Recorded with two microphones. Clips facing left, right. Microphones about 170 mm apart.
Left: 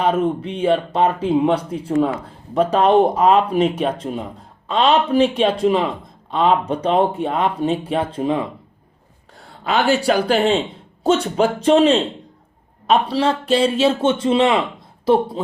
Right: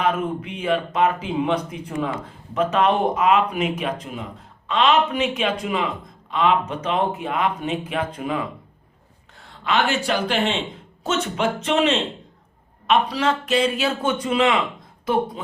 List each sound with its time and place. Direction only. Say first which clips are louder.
0.0 s a man's voice: left 5 dB; 30° left (ahead or behind)